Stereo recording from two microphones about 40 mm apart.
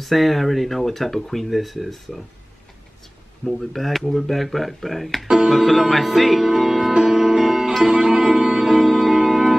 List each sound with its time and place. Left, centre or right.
0.0 s speech: centre
3.4 s speech: centre
7.1 s music: centre
8.6 s music: centre